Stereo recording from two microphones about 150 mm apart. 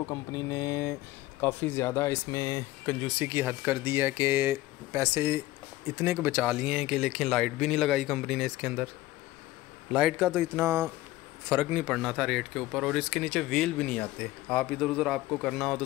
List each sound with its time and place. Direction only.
0.1 s speech: 20° left (ahead or behind)
3.2 s speech: 15° right (ahead or behind)
9.9 s speech: 5° right (ahead or behind)